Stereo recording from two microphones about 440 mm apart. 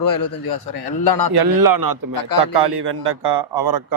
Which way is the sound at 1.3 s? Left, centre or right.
Right.